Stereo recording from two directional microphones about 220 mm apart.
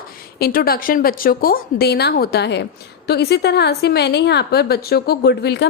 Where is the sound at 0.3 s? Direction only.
45° left (ahead or behind).